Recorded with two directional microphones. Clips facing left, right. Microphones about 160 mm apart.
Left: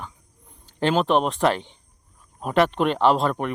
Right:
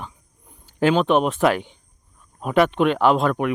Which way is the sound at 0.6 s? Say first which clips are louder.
Right 3 dB; centre (ahead or behind).